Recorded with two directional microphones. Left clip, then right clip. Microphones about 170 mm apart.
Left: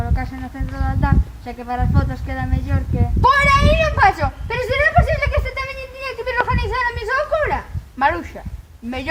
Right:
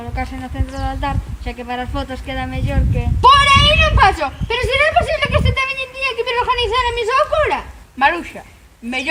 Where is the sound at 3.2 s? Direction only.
25° left (ahead or behind).